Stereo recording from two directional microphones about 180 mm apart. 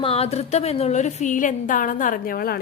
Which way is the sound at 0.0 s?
35° left (ahead or behind).